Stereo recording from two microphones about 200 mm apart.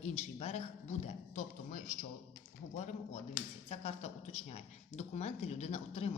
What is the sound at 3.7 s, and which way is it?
A man's voice, 30° left (ahead or behind).